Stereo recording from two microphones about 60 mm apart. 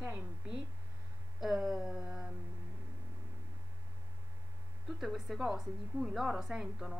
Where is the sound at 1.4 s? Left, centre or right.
Centre.